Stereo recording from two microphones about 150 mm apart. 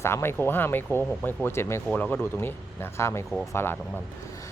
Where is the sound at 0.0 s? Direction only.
15° left (ahead or behind).